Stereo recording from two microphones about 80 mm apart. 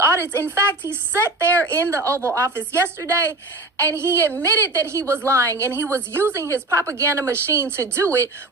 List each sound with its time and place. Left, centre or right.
0.0 s a woman's voice: right